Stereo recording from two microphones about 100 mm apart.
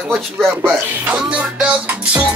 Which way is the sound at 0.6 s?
15° right (ahead or behind).